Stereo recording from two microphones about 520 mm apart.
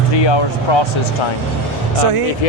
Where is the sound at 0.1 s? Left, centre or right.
Left.